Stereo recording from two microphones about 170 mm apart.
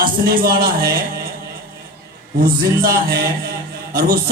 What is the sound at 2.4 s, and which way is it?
A man's voice, 60° right (ahead or behind).